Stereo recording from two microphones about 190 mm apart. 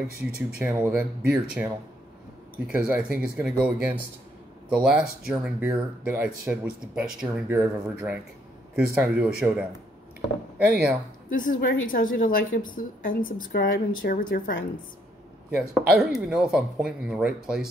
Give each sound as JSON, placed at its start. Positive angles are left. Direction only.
{"t": 0.4, "sound": "speech", "side_deg": -5}
{"t": 2.7, "sound": "speech", "side_deg": -10}
{"t": 11.2, "sound": "a woman's voice", "side_deg": 45}
{"t": 16.1, "sound": "speech", "side_deg": -5}